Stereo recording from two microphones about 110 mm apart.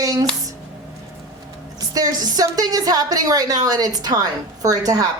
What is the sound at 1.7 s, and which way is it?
A woman's voice, 35° right (ahead or behind).